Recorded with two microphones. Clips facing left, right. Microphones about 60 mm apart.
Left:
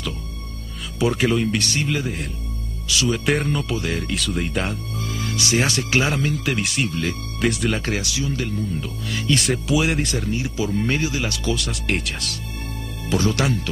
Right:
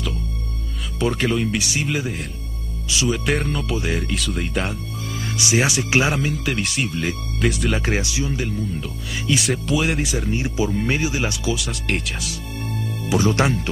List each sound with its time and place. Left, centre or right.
0.9 s speech: centre
3.7 s speech: centre
4.0 s speech: centre
5.2 s speech: centre
7.8 s speech: right; by 10.2 s centre
10.3 s speech: right
11.4 s speech: centre
13.3 s speech: right